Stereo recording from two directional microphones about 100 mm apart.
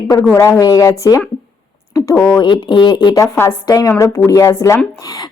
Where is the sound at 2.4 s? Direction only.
50° left (ahead or behind); by 4.8 s 30° left (ahead or behind).